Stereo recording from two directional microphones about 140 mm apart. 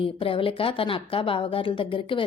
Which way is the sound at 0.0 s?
40° left (ahead or behind).